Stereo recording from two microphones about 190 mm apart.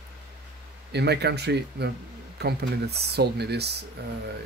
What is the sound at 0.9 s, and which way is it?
Speech, 60° right (ahead or behind).